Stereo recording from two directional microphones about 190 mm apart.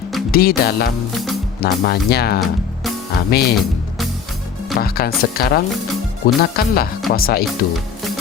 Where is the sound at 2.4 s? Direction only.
Centre (ahead or behind).